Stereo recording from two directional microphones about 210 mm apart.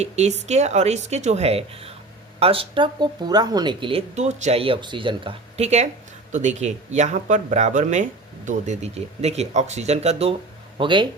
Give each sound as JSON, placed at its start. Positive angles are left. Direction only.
{"t": 0.0, "sound": "speech", "side_deg": -30}